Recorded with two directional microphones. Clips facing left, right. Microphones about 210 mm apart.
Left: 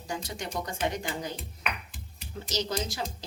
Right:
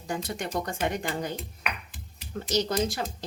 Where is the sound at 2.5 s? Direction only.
55° right (ahead or behind).